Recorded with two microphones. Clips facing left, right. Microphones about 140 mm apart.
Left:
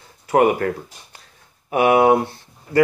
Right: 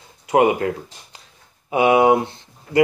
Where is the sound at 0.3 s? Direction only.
15° right (ahead or behind).